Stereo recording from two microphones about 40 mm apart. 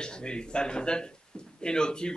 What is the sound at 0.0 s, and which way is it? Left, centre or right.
Speech, left.